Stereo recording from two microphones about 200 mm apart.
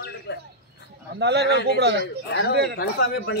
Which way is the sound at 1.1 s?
55° right (ahead or behind).